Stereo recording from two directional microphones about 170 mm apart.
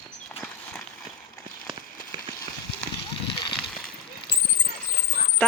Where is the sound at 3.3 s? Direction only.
30° left (ahead or behind).